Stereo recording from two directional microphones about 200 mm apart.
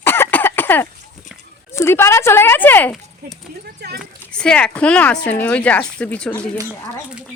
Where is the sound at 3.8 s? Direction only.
55° right (ahead or behind).